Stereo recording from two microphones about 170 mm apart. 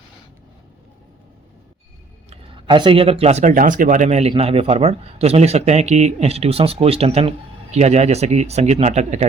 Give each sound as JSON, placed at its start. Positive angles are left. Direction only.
{"t": 2.3, "sound": "speech", "side_deg": -30}